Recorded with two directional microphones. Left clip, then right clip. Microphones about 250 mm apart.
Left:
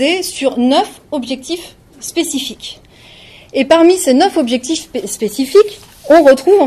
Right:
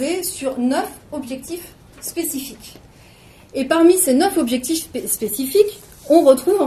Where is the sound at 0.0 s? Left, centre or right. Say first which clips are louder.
Left 8 dB; left.